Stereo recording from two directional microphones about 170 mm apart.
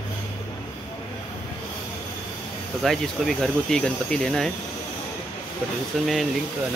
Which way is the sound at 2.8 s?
Centre (ahead or behind).